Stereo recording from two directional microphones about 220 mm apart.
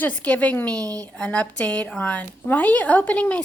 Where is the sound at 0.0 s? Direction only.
5° left (ahead or behind).